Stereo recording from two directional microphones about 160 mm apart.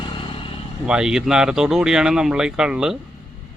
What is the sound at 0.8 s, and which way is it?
Speech, 5° right (ahead or behind).